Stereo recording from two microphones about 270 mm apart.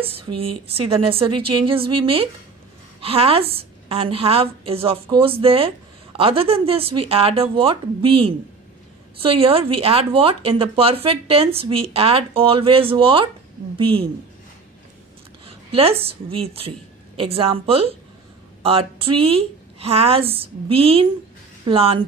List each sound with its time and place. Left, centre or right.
0.4 s speech: right
15.4 s a woman's voice: right